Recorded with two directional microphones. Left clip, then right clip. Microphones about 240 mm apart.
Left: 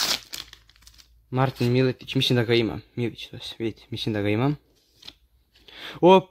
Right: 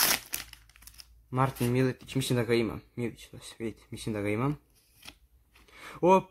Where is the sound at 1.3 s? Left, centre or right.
Left.